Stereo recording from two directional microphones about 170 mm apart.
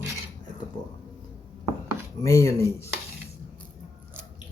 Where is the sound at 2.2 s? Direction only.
20° left (ahead or behind).